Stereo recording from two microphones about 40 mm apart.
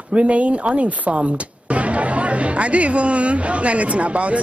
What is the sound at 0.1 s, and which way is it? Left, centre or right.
Speech, right.